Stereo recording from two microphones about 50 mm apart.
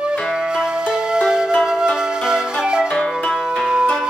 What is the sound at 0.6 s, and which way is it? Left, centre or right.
Music, centre.